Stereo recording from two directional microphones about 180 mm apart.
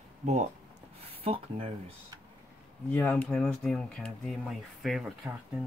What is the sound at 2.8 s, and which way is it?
Speech, 10° left (ahead or behind).